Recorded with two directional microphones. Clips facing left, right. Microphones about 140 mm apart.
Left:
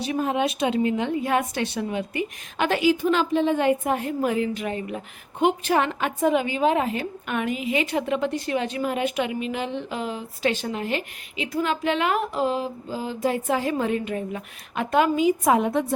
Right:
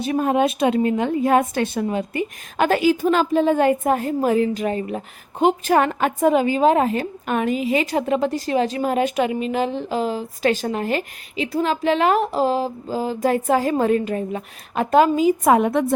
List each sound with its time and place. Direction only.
0.0 s a woman's voice: 50° right (ahead or behind)
15.4 s a woman's voice: 60° right (ahead or behind)